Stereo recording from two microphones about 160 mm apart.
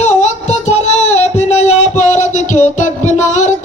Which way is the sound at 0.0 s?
45° left (ahead or behind).